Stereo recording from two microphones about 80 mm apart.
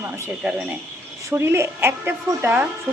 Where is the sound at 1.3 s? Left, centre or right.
Right.